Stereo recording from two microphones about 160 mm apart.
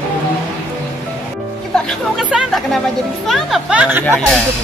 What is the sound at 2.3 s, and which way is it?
A woman's voice, 5° right (ahead or behind).